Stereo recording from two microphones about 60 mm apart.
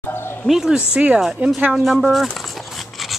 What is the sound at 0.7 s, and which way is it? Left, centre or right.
Speech, centre.